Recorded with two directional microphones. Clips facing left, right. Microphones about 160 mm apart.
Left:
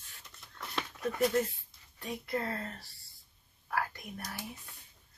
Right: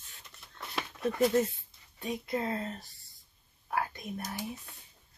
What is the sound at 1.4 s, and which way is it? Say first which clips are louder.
Speech: right 3 dB; 20° right (ahead or behind).